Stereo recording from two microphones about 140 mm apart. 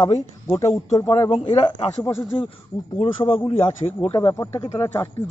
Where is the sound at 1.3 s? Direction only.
35° left (ahead or behind).